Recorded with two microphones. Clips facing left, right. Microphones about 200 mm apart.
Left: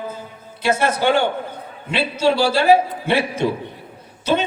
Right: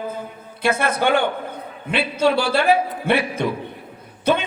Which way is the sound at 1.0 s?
55° right (ahead or behind).